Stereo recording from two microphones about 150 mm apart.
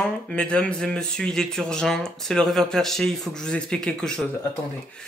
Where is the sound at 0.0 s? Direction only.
5° left (ahead or behind).